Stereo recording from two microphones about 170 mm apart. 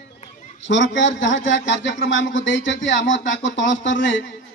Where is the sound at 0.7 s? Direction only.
90° left.